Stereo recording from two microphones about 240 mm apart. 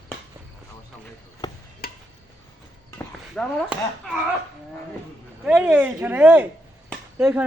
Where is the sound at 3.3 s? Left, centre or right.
Centre.